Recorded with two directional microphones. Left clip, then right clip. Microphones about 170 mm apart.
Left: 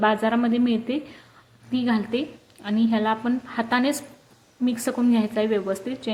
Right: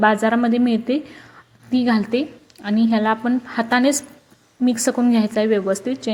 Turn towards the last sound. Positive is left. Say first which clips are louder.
# right 6 dB
turn(degrees=-25)  # may be behind; listen again after turning